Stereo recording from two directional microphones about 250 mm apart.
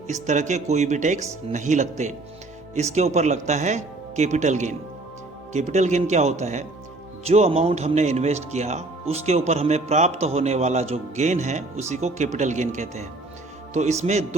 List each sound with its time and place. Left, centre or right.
0.1 s speech: right